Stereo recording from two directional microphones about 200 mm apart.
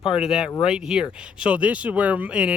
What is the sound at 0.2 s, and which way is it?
Speech, 5° right (ahead or behind).